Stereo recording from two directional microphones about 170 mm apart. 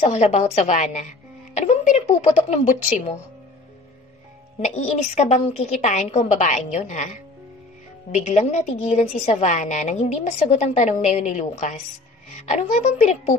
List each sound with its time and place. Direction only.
0.0 s a woman's voice: 40° left (ahead or behind)
4.6 s a woman's voice: 45° left (ahead or behind)
8.1 s a woman's voice: 40° left (ahead or behind)